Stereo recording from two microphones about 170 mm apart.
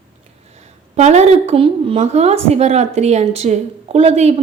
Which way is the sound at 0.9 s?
40° right (ahead or behind).